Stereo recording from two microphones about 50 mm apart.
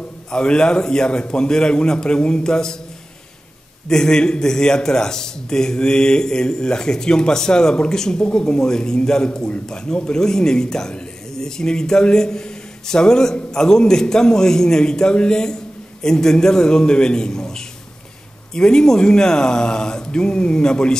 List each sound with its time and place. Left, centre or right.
0.3 s a man's voice: centre
3.9 s a man's voice: centre